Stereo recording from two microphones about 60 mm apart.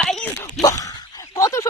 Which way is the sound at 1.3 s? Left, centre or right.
Left.